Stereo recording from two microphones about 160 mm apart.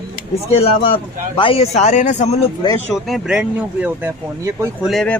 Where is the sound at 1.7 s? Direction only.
50° left (ahead or behind).